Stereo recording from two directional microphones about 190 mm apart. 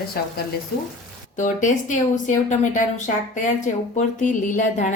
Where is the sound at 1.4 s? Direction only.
40° left (ahead or behind).